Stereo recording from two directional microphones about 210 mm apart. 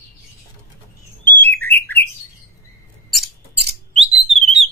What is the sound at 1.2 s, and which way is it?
Bird, 10° left (ahead or behind).